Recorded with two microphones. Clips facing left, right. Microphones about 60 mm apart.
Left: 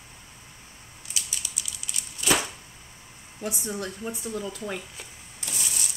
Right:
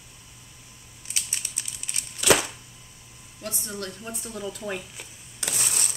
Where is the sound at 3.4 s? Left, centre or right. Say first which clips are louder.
Left 3 dB; centre.